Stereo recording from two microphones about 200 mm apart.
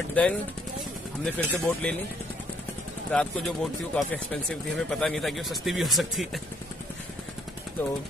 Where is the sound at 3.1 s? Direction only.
5° left (ahead or behind).